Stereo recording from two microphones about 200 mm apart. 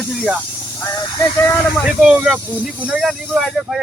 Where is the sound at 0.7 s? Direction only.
15° left (ahead or behind).